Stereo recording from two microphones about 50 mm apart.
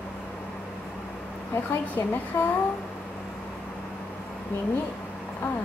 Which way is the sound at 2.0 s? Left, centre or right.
Left.